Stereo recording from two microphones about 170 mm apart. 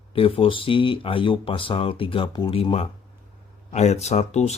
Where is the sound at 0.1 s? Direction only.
35° left (ahead or behind).